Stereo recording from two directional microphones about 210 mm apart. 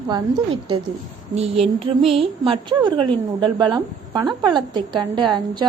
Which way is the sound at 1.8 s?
25° right (ahead or behind).